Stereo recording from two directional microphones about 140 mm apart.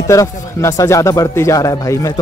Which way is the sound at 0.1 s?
25° left (ahead or behind).